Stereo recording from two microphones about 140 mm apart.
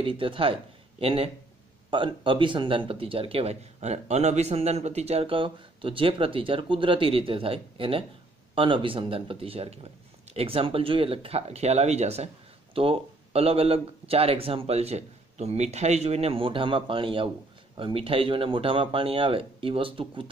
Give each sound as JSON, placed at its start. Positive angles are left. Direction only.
{"t": 0.0, "sound": "speech", "side_deg": -40}